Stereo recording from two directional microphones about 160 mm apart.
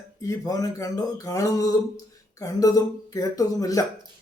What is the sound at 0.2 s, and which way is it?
Speech, 20° left (ahead or behind).